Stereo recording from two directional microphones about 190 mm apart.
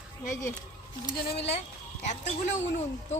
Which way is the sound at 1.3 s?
35° left (ahead or behind).